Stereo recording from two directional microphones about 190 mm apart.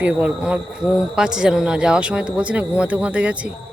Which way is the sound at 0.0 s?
5° right (ahead or behind).